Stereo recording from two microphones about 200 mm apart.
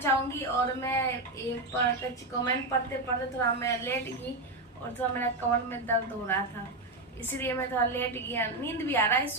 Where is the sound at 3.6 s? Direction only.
15° left (ahead or behind).